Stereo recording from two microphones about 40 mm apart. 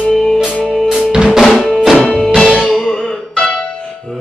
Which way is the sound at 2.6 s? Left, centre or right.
Centre.